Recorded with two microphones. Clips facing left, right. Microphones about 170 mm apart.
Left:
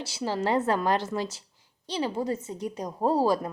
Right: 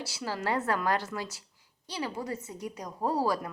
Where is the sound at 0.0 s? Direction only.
25° left (ahead or behind).